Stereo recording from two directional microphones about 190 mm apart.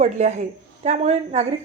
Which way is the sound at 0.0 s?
40° right (ahead or behind).